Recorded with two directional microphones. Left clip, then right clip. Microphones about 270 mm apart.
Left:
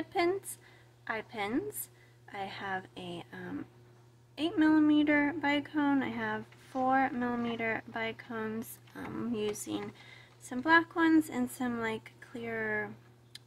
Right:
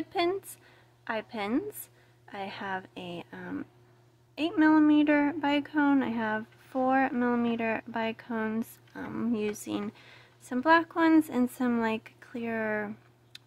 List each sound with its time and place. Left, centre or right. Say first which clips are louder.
0.1 s speech: right 2 dB; centre